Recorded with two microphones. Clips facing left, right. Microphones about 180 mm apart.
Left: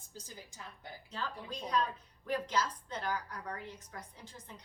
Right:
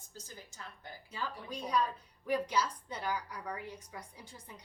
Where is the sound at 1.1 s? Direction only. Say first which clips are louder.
Right 1 dB; 10° right (ahead or behind).